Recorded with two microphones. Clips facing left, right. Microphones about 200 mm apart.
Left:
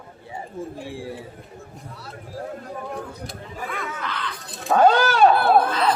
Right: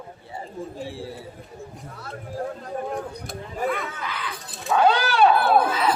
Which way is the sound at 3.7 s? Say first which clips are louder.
Right 2 dB; 5° right (ahead or behind).